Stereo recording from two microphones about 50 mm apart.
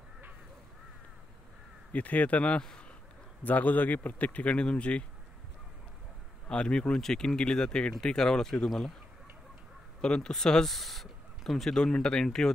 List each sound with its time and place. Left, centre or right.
1.9 s a man's voice: left
6.5 s speech: left
10.0 s speech: centre